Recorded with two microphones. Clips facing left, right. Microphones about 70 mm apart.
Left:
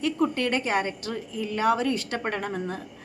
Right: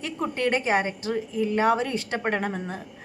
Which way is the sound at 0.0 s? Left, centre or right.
Right.